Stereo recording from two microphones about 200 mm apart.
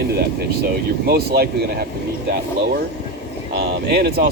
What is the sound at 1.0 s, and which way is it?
Speech, 50° right (ahead or behind).